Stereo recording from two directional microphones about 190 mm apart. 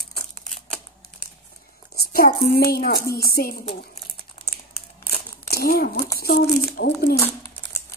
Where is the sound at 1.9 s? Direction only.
55° left (ahead or behind).